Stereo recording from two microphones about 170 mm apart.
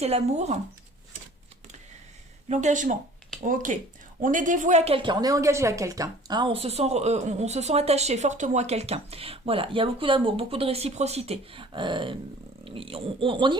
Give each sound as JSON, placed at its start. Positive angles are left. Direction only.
{"t": 0.0, "sound": "a woman's voice", "side_deg": -40}
{"t": 2.5, "sound": "a woman's voice", "side_deg": -45}